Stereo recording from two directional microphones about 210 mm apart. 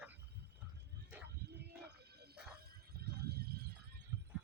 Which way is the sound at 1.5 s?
50° right (ahead or behind).